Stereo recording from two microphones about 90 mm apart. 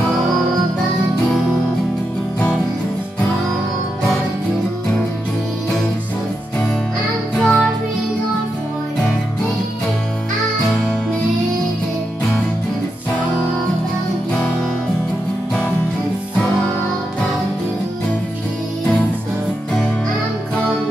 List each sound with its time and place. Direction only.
7.3 s music: 5° left (ahead or behind)